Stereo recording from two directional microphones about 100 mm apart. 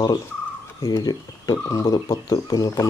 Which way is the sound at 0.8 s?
40° left (ahead or behind).